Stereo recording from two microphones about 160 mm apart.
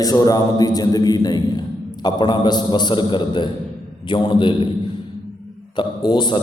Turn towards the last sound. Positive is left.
turn(degrees=30)  # may be behind; listen again after turning